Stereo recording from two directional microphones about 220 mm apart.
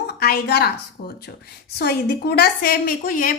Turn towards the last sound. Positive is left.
turn(degrees=40)  # may be behind; listen again after turning